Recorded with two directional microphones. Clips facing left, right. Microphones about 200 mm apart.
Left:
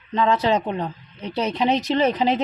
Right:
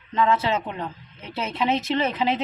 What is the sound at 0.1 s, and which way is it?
Speech, 35° left (ahead or behind).